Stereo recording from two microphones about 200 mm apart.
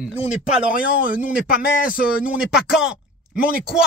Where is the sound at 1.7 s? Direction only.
45° left (ahead or behind).